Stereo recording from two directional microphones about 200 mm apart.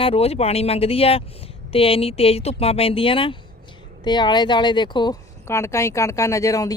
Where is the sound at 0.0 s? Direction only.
30° left (ahead or behind).